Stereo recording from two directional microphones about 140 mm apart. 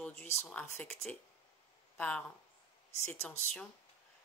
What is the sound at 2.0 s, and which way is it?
Speech, 10° left (ahead or behind).